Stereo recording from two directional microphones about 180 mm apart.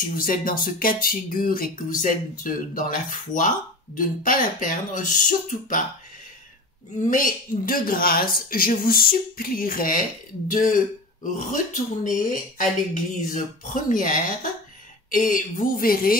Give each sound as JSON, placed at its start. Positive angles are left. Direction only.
{"t": 0.0, "sound": "speech", "side_deg": 50}
{"t": 7.0, "sound": "speech", "side_deg": 50}